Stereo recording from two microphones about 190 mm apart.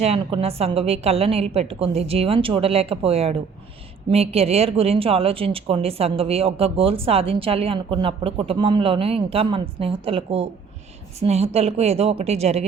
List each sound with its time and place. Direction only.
0.0 s a woman's voice: 30° right (ahead or behind)